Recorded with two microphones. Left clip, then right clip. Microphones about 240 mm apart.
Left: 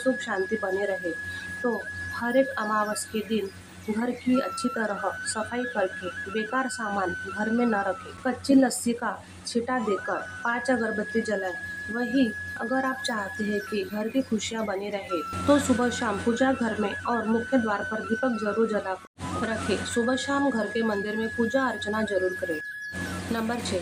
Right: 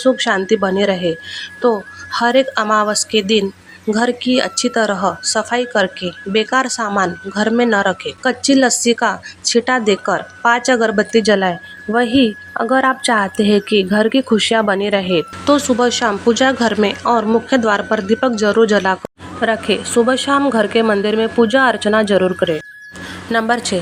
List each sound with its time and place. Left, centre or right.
0.0 s speech: right
2.1 s speech: right
23.3 s speech: right